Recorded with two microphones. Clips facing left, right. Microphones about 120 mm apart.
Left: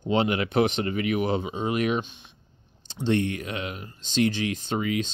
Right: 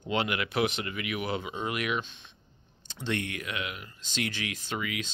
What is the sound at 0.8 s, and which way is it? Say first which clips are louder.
Speech: left 9 dB; 35° left (ahead or behind).